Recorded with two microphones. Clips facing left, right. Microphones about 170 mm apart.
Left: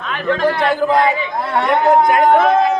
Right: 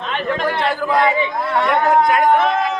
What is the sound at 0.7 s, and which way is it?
Speech, 20° left (ahead or behind).